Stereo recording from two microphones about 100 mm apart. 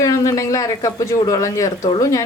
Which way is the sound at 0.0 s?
35° left (ahead or behind).